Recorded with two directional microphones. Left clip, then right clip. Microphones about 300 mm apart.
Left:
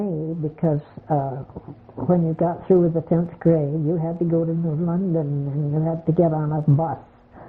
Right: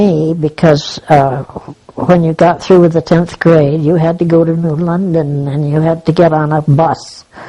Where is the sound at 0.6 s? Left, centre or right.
Right.